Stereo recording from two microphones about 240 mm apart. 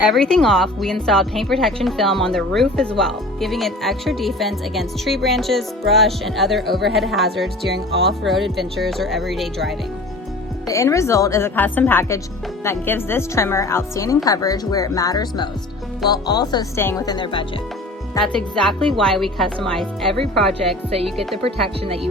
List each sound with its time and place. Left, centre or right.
0.1 s speech: centre
10.7 s speech: centre
18.2 s speech: centre